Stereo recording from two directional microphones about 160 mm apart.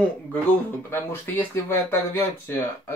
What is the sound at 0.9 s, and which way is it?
Speech, 15° left (ahead or behind).